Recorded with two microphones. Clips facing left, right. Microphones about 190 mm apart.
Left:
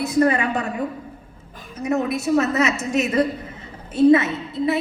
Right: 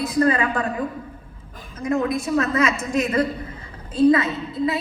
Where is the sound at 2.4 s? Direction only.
25° left (ahead or behind).